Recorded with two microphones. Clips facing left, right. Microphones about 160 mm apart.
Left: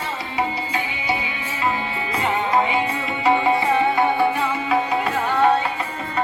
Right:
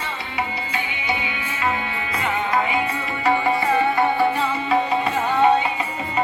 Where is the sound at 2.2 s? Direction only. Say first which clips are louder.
Left 2 dB; 25° left (ahead or behind); by 4.8 s 10° left (ahead or behind).